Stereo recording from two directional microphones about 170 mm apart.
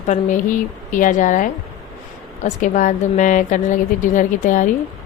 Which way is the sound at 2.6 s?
45° left (ahead or behind).